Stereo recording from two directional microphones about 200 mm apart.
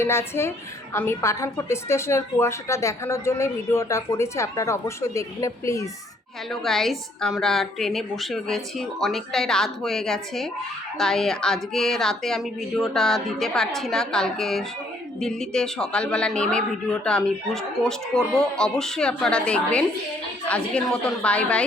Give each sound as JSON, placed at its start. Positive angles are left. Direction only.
{"t": 0.0, "sound": "a woman's voice", "side_deg": 10}
{"t": 6.5, "sound": "a man's voice", "side_deg": 0}